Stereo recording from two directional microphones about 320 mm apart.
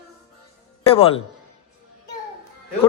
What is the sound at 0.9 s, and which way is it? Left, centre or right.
Speech, centre.